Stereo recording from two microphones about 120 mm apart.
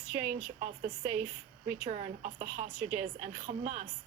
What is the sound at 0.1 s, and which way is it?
A woman's voice, 90° right.